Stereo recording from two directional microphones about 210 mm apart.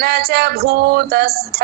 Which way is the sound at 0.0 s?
50° right (ahead or behind).